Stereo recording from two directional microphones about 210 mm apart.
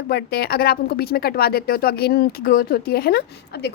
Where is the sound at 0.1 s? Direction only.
50° left (ahead or behind).